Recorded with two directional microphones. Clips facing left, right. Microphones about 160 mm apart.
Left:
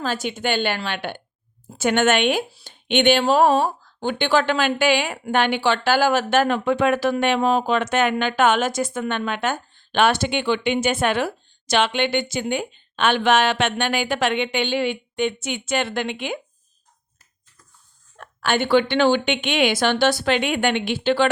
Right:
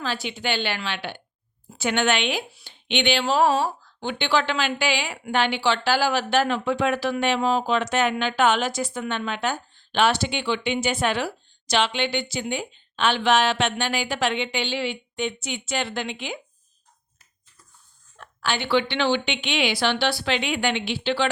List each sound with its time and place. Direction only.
0.0 s speech: 45° left (ahead or behind)
18.2 s speech: 50° left (ahead or behind)